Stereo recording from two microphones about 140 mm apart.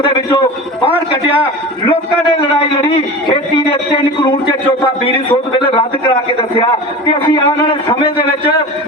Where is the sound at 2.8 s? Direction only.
40° left (ahead or behind).